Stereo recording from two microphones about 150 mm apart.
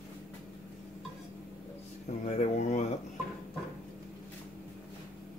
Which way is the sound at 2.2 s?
50° left (ahead or behind).